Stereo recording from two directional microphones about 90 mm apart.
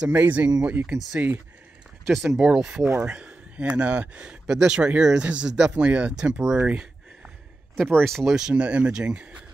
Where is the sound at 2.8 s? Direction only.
30° right (ahead or behind).